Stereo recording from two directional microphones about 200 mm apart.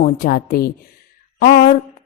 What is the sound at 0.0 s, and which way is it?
Speech, 45° left (ahead or behind).